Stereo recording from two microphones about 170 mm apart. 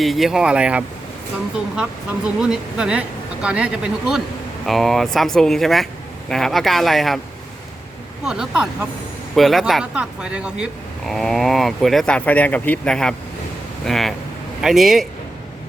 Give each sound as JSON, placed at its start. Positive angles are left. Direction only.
{"t": 0.0, "sound": "speech", "side_deg": 0}
{"t": 8.2, "sound": "speech", "side_deg": -5}